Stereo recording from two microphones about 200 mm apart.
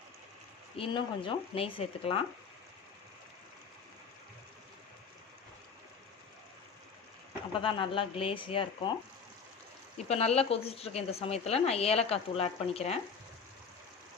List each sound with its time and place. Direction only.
0.8 s speech: 25° left (ahead or behind)
7.6 s speech: 25° left (ahead or behind)
10.1 s a woman's voice: 30° left (ahead or behind)